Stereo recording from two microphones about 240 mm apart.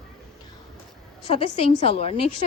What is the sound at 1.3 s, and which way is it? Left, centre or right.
Speech, left.